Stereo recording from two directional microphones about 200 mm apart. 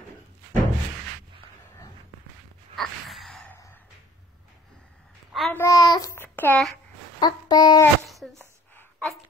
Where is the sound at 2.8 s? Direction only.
Centre (ahead or behind).